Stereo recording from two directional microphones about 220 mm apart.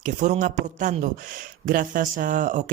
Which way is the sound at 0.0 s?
35° right (ahead or behind).